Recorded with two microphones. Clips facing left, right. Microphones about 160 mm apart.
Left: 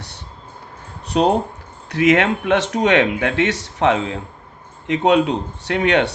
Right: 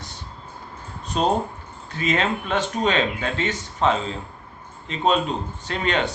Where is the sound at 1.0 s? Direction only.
70° left (ahead or behind).